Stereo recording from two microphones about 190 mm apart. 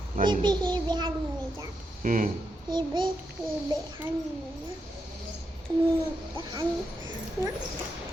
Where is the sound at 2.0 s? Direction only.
45° right (ahead or behind).